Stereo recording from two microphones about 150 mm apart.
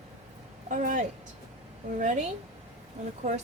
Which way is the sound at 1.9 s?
55° right (ahead or behind).